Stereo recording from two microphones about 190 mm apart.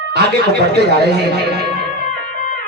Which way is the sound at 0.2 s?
60° right (ahead or behind).